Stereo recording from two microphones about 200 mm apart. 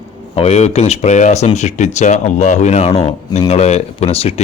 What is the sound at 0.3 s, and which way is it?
A man's voice, 30° left (ahead or behind).